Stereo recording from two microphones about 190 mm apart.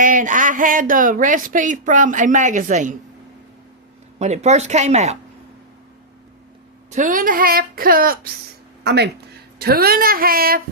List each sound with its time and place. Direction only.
0.0 s speech: 45° right (ahead or behind)
4.2 s speech: 35° right (ahead or behind)
6.9 s speech: 45° right (ahead or behind)
8.8 s speech: 60° right (ahead or behind)